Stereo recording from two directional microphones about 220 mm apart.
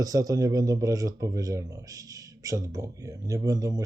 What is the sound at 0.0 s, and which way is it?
Speech, 15° right (ahead or behind).